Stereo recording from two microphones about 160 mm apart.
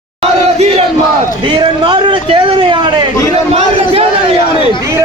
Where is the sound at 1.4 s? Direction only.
30° right (ahead or behind).